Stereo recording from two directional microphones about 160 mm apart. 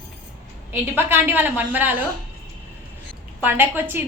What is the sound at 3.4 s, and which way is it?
Speech, 15° right (ahead or behind).